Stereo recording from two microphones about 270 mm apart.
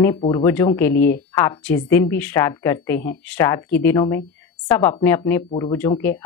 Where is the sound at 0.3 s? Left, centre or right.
Centre.